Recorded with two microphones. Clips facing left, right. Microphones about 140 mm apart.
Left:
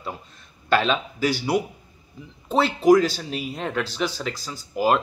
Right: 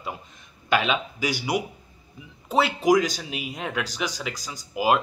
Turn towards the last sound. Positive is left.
turn(degrees=-10)  # may be behind; listen again after turning